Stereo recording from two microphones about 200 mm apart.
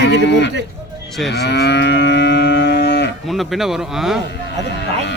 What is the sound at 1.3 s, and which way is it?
Livestock, 55° left (ahead or behind).